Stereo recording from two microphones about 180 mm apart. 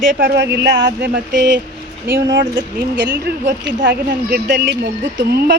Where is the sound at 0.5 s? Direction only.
70° right (ahead or behind).